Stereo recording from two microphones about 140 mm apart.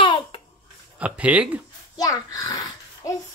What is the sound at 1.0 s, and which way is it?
Speech, 10° right (ahead or behind).